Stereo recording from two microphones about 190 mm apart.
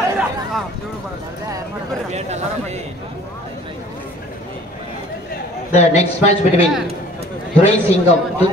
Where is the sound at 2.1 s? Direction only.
35° right (ahead or behind).